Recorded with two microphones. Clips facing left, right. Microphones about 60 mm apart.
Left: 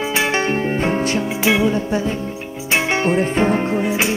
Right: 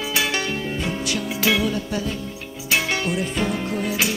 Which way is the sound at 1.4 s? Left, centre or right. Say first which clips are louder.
Left 4 dB; left.